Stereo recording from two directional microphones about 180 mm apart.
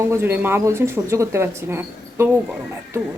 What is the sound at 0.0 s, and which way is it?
A woman's voice, 15° right (ahead or behind).